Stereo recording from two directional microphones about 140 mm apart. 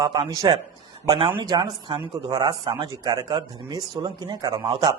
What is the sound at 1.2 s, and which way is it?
A man's voice, 35° right (ahead or behind).